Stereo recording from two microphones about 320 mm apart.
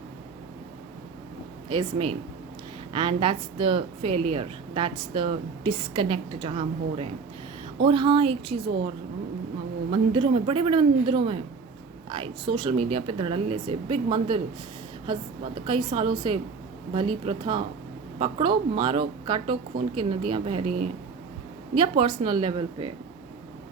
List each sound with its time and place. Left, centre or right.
1.7 s speech: centre
9.9 s speech: centre
19.7 s speech: right
20.3 s speech: centre
21.8 s speech: centre